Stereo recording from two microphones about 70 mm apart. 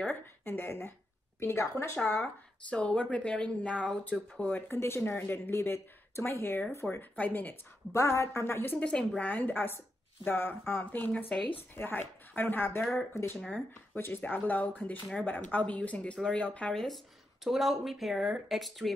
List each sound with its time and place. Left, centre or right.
0.1 s speech: left
2.7 s speech: centre
4.6 s speech: left
7.9 s a woman's voice: left
8.7 s speech: centre
9.2 s speech: left
13.1 s speech: left; by 16.7 s centre
16.7 s speech: centre